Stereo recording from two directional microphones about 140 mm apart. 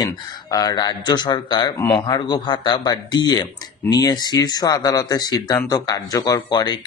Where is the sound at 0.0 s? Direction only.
25° left (ahead or behind).